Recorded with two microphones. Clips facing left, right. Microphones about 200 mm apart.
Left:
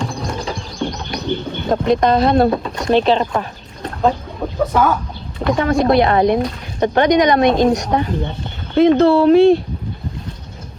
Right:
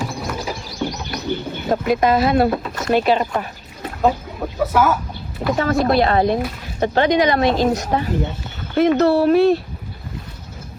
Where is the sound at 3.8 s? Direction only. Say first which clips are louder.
Left 1 dB; 5° right (ahead or behind).